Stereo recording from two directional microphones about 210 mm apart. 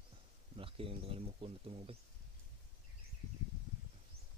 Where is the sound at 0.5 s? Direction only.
25° right (ahead or behind).